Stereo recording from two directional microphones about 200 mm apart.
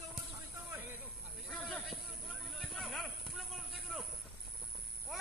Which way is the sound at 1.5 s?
5° left (ahead or behind).